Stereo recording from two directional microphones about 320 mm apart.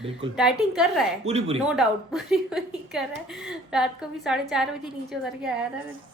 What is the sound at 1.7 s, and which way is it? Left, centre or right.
A woman's voice, centre.